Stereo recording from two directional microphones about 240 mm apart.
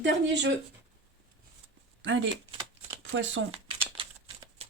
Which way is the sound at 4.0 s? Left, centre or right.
Right.